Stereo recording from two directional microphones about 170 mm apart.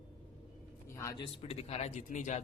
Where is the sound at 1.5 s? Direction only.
40° left (ahead or behind).